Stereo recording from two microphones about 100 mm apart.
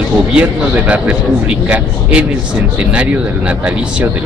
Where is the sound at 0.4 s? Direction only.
15° right (ahead or behind).